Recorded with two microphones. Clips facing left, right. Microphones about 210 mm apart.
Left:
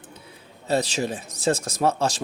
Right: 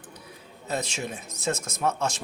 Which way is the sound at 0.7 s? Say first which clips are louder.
Left 7 dB; 35° left (ahead or behind).